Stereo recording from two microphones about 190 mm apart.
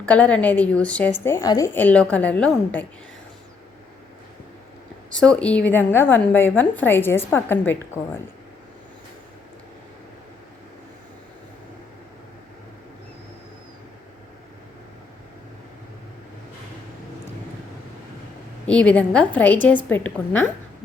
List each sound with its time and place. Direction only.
0.0 s a woman's voice: 10° left (ahead or behind)
5.1 s a woman's voice: 5° left (ahead or behind)
18.6 s a woman's voice: 5° left (ahead or behind)